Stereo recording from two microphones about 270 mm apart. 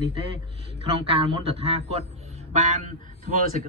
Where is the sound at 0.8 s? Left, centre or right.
Right.